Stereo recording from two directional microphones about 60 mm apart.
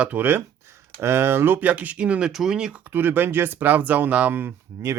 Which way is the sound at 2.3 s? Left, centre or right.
Centre.